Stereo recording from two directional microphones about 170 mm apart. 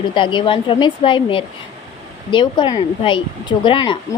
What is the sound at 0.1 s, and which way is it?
A woman's voice, 30° left (ahead or behind).